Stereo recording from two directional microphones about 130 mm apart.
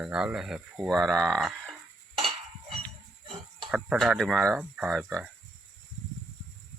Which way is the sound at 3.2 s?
40° right (ahead or behind).